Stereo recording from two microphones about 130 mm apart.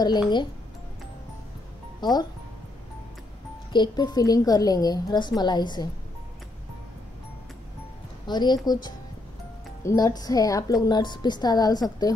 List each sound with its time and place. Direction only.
0.0 s a woman's voice: 35° left (ahead or behind)
2.0 s speech: 30° left (ahead or behind)
3.7 s a woman's voice: 35° left (ahead or behind)
8.3 s a woman's voice: 35° left (ahead or behind)